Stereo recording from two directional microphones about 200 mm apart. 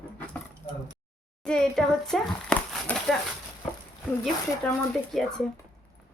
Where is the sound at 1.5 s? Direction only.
5° left (ahead or behind).